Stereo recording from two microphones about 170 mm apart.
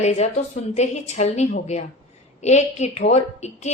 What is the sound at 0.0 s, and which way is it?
A woman's voice, 40° left (ahead or behind).